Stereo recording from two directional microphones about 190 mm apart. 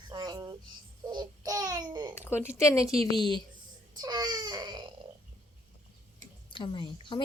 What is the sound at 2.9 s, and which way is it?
Speech, 30° right (ahead or behind).